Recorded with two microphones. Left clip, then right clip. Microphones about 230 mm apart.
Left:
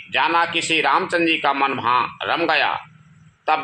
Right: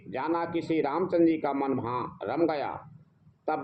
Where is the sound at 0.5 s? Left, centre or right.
Left.